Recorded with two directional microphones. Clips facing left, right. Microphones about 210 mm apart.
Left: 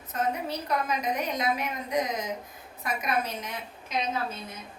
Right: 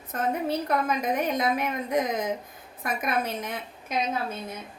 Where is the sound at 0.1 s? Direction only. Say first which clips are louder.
Right 3 dB; 55° right (ahead or behind).